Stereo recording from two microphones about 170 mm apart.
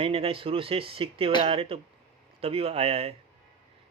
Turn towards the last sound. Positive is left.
turn(degrees=-35)  # may be behind; listen again after turning